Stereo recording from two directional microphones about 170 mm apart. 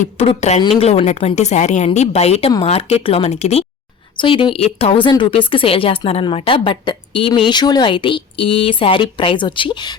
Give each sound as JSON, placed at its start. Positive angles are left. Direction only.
{"t": 0.0, "sound": "a woman's voice", "side_deg": 40}